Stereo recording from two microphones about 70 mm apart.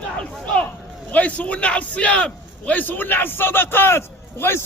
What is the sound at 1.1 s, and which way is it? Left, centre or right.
A man's voice, centre.